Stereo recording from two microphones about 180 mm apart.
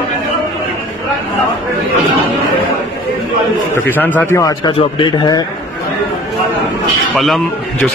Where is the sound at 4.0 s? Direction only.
10° left (ahead or behind); by 5.4 s 25° left (ahead or behind).